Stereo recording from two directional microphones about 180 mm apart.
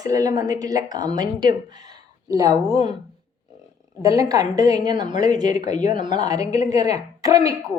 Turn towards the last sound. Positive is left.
turn(degrees=-20)  # may be behind; listen again after turning